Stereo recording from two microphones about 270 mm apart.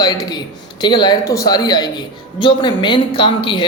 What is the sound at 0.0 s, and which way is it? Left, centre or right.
A woman's voice, centre.